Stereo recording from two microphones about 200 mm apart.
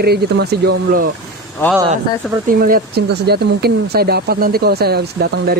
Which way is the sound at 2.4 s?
45° right (ahead or behind).